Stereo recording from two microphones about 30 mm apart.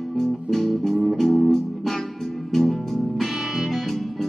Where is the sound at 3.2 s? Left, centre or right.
Centre.